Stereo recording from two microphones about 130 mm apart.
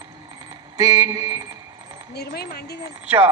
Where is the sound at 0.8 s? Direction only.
30° right (ahead or behind).